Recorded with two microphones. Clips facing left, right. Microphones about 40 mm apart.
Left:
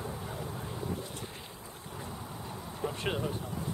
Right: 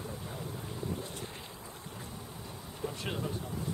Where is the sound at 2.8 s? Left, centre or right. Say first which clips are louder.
Left 4 dB; left.